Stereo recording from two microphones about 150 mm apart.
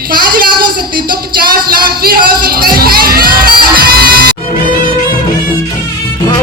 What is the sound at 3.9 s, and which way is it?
Music, 90° right.